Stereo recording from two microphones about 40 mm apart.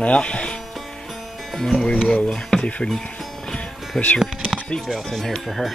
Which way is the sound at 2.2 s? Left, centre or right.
Centre.